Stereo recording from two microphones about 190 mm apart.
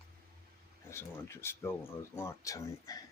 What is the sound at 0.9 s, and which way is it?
Speech, 15° left (ahead or behind).